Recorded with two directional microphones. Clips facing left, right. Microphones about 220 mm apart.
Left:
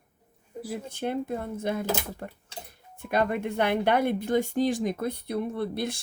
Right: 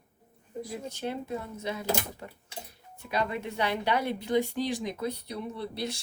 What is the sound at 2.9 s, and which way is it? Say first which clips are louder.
Speech: left 5 dB; 55° left (ahead or behind).